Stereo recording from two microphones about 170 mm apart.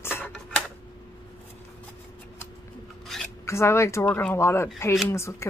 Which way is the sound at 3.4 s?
15° left (ahead or behind).